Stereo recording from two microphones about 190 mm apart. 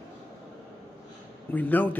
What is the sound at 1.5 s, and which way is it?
Speech, 10° left (ahead or behind).